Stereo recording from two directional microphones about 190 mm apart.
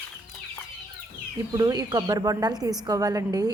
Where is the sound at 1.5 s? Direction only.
20° right (ahead or behind).